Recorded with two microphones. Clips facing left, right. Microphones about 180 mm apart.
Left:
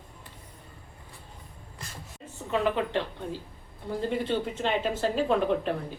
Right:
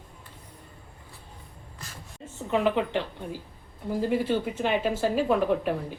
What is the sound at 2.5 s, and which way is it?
Speech, 15° right (ahead or behind).